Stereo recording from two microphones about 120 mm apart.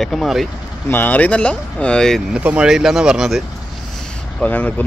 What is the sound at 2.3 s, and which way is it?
Speech, 10° right (ahead or behind).